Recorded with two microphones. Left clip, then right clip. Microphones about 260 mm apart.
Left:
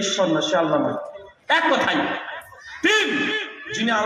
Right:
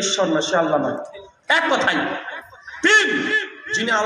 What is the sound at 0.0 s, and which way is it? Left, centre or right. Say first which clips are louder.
A man's voice: right 1 dB; right.